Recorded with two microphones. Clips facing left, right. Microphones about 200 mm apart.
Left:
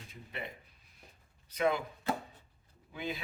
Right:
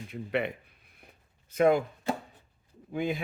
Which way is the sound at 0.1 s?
70° right (ahead or behind).